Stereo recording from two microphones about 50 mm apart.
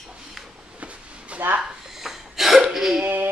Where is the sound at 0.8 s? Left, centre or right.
Right.